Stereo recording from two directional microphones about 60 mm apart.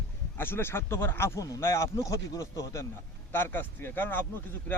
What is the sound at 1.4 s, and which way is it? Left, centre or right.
Speech, left.